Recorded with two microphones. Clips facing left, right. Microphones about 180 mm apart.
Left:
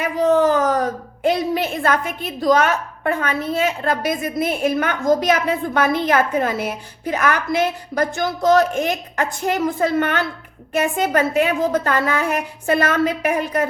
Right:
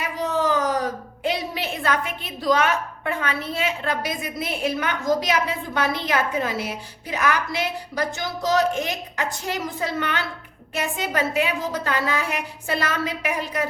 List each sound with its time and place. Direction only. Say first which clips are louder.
0.0 s a woman's voice: left 8 dB; 50° left (ahead or behind)